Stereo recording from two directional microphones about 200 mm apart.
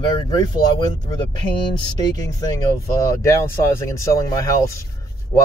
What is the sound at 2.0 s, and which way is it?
Speech, 20° left (ahead or behind).